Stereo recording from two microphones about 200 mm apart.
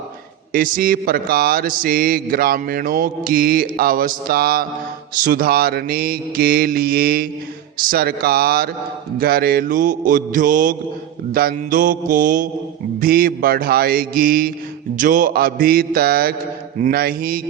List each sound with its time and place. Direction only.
0.5 s mantra: 45° right (ahead or behind)